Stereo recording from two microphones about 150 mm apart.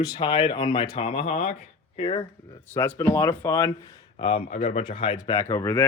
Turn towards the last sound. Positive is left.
turn(degrees=20)  # may be behind; listen again after turning